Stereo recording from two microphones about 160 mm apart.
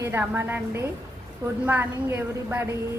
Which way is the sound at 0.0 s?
15° right (ahead or behind).